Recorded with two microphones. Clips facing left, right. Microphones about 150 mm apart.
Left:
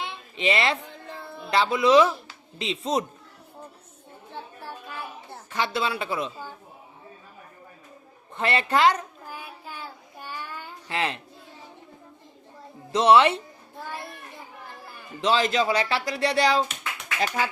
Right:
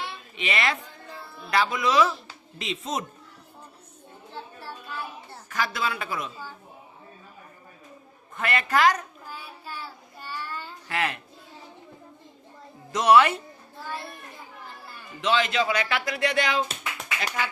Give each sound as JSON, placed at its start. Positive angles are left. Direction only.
{"t": 0.3, "sound": "speech", "side_deg": 30}
{"t": 4.6, "sound": "a sound", "side_deg": 15}
{"t": 5.5, "sound": "speech", "side_deg": 30}
{"t": 8.4, "sound": "speech", "side_deg": 30}
{"t": 9.3, "sound": "child singing", "side_deg": 15}
{"t": 10.9, "sound": "speech", "side_deg": 25}
{"t": 12.9, "sound": "speech", "side_deg": 25}
{"t": 15.2, "sound": "speech", "side_deg": 35}